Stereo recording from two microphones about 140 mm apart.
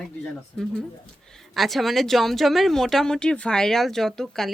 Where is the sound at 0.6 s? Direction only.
5° left (ahead or behind).